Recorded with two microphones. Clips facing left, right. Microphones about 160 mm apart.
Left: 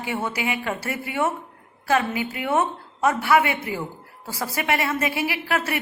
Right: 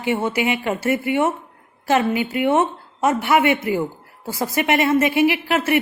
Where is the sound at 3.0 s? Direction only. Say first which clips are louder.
Right 2 dB; 20° right (ahead or behind).